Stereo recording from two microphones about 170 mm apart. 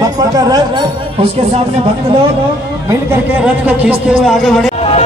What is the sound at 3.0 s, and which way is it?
Speech, 10° right (ahead or behind).